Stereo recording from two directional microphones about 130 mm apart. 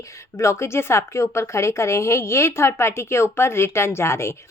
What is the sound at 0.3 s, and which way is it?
A woman's voice, 20° left (ahead or behind).